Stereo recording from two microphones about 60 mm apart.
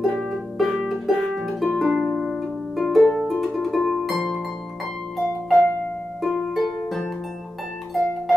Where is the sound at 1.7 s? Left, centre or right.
Centre.